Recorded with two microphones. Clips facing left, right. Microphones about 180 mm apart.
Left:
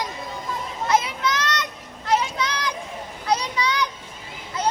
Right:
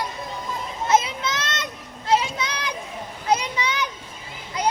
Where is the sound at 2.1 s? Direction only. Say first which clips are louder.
Right 1 dB; 20° right (ahead or behind).